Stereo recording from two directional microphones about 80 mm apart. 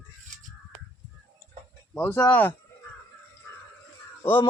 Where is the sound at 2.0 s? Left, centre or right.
Left.